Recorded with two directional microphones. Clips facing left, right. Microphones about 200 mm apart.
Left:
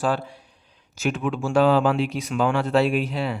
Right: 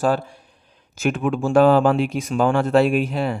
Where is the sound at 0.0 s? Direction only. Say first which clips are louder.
Right 4 dB; 45° right (ahead or behind).